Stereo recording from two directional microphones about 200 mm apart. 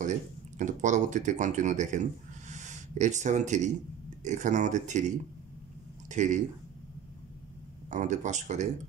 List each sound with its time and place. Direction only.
0.6 s speech: 40° right (ahead or behind)
7.9 s speech: 40° right (ahead or behind)